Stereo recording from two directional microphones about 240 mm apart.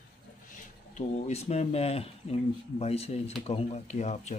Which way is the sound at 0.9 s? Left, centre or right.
Left.